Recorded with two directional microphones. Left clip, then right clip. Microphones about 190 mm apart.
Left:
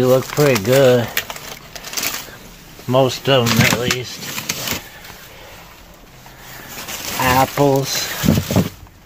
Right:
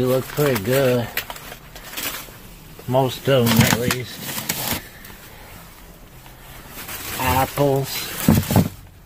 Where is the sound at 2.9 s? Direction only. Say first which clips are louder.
Left 4 dB; 25° left (ahead or behind).